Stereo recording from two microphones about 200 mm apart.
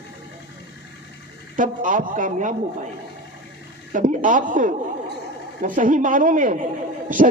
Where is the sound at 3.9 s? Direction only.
40° right (ahead or behind).